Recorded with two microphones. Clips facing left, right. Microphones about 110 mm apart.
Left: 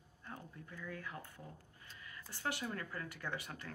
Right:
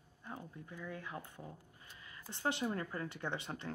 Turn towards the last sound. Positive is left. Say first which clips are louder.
# right 3 dB
turn(degrees=-25)  # may be behind; listen again after turning